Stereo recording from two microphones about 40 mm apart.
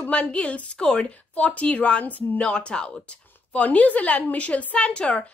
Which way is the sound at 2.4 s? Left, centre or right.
Left.